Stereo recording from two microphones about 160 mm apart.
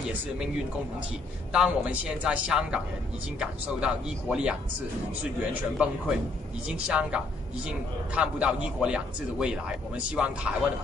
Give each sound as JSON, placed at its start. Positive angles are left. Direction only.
{"t": 1.5, "sound": "a woman's voice", "side_deg": -5}